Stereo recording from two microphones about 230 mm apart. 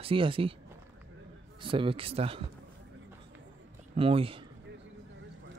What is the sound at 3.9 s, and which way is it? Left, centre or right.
Speech, right.